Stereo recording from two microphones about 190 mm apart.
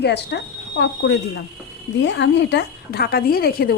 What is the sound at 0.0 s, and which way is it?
A woman's voice, 60° left (ahead or behind).